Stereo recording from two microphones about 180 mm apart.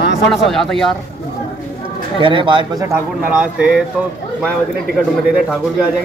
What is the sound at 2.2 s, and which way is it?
Speech, 30° right (ahead or behind).